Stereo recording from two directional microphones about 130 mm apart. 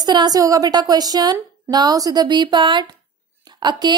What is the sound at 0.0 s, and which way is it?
A woman's voice, 30° right (ahead or behind).